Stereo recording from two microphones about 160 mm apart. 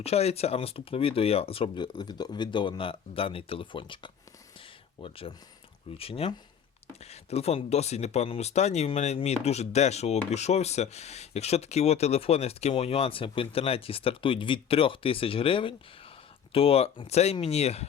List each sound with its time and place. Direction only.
0.0 s speech: 40° left (ahead or behind)